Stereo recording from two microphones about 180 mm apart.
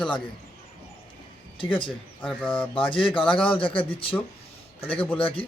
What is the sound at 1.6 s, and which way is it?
Speech, 30° left (ahead or behind).